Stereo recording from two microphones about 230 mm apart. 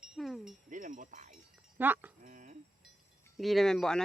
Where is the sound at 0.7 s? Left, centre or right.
Right.